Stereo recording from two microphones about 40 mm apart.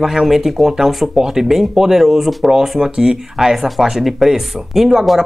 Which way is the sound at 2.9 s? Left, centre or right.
Centre.